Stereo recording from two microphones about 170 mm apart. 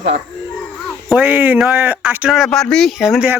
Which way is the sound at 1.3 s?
10° right (ahead or behind).